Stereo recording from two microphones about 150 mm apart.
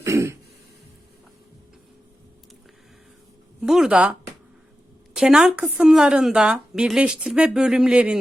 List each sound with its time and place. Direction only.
0.0 s throat clearing: 20° right (ahead or behind)
3.6 s speech: 5° right (ahead or behind)